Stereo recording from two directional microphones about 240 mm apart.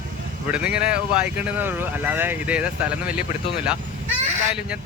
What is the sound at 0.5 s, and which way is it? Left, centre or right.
Speech, centre.